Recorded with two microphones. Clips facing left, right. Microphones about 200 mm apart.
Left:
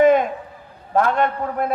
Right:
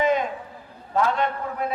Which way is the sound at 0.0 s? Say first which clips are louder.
Left 8 dB; 55° left (ahead or behind).